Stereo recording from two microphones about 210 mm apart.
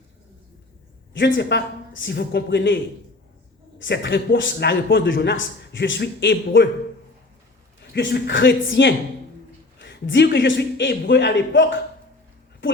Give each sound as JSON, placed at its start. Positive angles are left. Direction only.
{"t": 1.1, "sound": "a man's voice", "side_deg": 55}
{"t": 3.8, "sound": "a man's voice", "side_deg": 55}
{"t": 7.9, "sound": "a man's voice", "side_deg": 55}